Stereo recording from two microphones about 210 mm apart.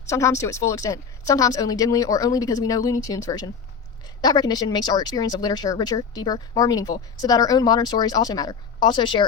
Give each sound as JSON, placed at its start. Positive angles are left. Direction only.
{"t": 0.1, "sound": "speech", "side_deg": 15}